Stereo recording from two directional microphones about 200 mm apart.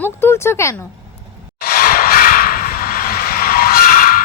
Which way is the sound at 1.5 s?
50° left (ahead or behind).